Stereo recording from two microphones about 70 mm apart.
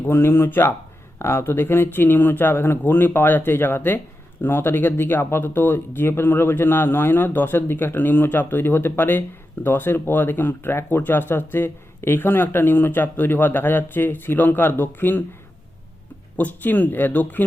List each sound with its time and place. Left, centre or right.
0.0 s speech: left
16.4 s speech: left